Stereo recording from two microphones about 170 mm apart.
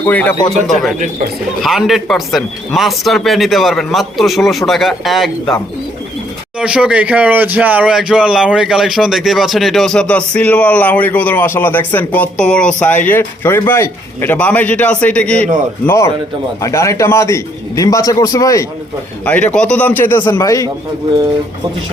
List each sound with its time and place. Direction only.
0.0 s speech: 10° left (ahead or behind)
6.6 s a man's voice: 5° right (ahead or behind); by 20.7 s 20° left (ahead or behind)